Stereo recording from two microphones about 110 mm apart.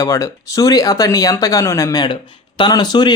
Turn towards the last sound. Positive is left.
turn(degrees=40)  # may be behind; listen again after turning